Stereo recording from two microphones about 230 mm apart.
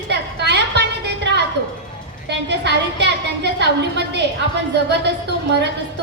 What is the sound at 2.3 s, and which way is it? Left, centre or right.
A woman's voice, right.